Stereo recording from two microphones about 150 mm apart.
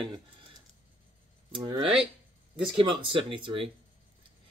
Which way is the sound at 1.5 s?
35° right (ahead or behind).